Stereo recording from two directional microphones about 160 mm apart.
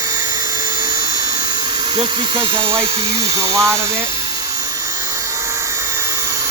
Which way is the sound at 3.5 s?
20° right (ahead or behind).